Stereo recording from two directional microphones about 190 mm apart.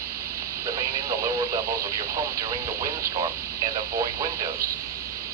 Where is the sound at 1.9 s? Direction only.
15° right (ahead or behind).